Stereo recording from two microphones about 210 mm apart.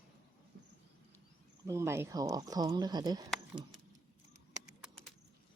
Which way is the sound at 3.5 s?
20° right (ahead or behind).